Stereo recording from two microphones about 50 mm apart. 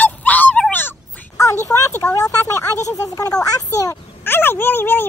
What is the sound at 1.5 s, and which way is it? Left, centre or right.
Speech, left.